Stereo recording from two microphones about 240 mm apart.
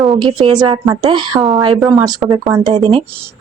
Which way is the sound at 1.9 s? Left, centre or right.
Centre.